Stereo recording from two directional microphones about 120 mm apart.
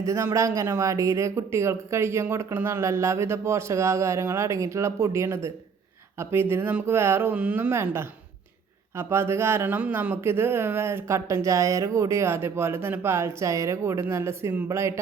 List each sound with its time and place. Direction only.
0.0 s speech: 25° right (ahead or behind)